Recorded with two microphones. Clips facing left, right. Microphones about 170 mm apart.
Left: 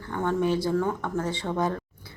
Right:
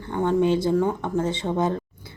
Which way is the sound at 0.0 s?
20° right (ahead or behind).